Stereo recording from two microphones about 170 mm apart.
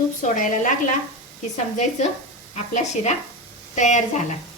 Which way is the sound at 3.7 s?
45° left (ahead or behind).